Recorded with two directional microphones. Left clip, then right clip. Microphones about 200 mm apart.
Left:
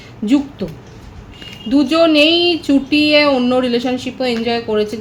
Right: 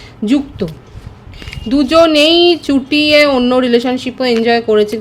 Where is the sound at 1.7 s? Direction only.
55° right (ahead or behind).